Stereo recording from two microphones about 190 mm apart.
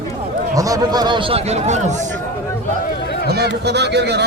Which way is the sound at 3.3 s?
60° right (ahead or behind).